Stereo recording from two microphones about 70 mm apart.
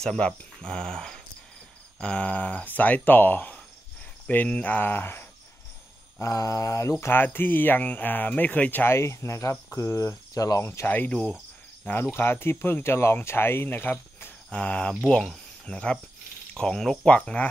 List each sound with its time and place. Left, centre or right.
0.0 s speech: centre; by 5.2 s left
6.1 s mantra: left
7.1 s speech: left
8.9 s mantra: left
10.6 s speech: left
10.9 s speech: left
11.8 s speech: left
14.5 s speech: centre